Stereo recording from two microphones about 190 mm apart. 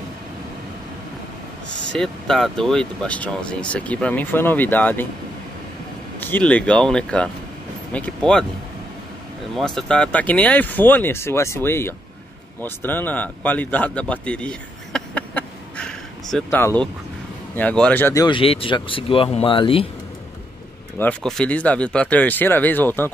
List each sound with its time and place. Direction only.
1.9 s speech: 5° left (ahead or behind)
6.1 s speech: 10° left (ahead or behind)
9.6 s speech: 5° left (ahead or behind)
12.6 s a sound: 10° left (ahead or behind)
16.4 s speech: 10° left (ahead or behind); by 19.9 s 30° left (ahead or behind)
21.0 s speech: 5° left (ahead or behind)